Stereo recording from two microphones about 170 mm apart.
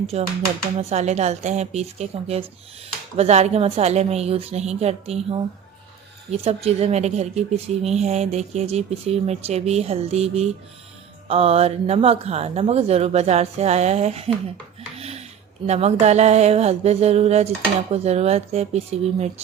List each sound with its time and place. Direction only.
0.1 s speech: 35° right (ahead or behind)
14.9 s a sound: 40° right (ahead or behind)
15.6 s speech: 40° right (ahead or behind)